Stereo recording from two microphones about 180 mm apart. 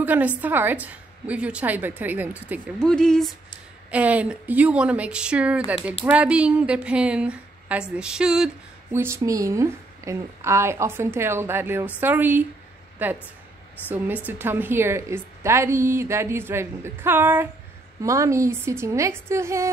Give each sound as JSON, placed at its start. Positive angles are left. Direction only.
{"t": 0.0, "sound": "a woman's voice", "side_deg": -10}
{"t": 2.8, "sound": "speech", "side_deg": 5}
{"t": 3.9, "sound": "a woman's voice", "side_deg": -10}
{"t": 8.9, "sound": "a woman's voice", "side_deg": -15}